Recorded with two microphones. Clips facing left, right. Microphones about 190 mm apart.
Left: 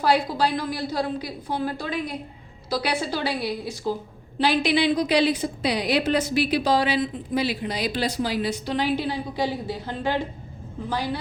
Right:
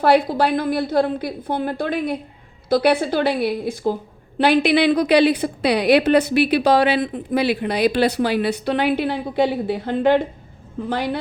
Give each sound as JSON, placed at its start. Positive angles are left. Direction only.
{"t": 0.0, "sound": "a woman's voice", "side_deg": -55}